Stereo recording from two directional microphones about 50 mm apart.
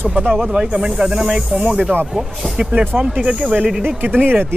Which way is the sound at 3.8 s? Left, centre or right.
Right.